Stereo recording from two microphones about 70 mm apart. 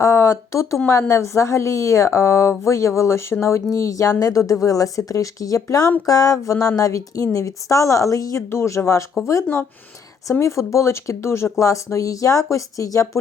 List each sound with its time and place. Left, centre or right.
0.0 s a woman's voice: left
8.4 s a woman's voice: left
10.4 s a woman's voice: left